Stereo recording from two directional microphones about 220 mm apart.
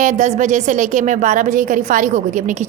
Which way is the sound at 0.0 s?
35° right (ahead or behind).